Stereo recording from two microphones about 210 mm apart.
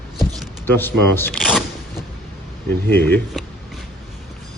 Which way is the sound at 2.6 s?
50° right (ahead or behind).